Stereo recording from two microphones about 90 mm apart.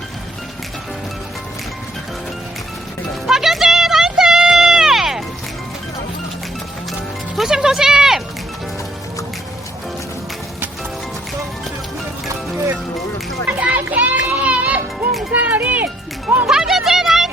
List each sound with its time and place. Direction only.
3.2 s music: 5° right (ahead or behind)
7.3 s a sound: 5° right (ahead or behind)
13.6 s music: 15° right (ahead or behind)
15.3 s run: 15° right (ahead or behind)
16.5 s music: 5° right (ahead or behind)